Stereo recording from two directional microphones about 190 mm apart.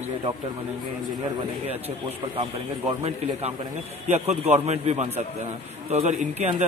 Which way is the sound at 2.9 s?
30° right (ahead or behind).